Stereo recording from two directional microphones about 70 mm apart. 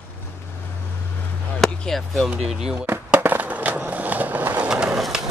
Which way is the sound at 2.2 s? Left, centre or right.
Centre.